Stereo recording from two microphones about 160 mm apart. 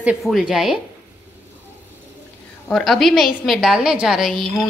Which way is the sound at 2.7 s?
Centre (ahead or behind).